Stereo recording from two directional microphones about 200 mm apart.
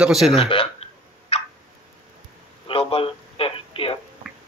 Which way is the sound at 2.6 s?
30° left (ahead or behind).